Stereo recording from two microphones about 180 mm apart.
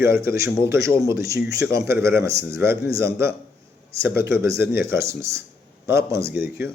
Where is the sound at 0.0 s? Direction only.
15° right (ahead or behind).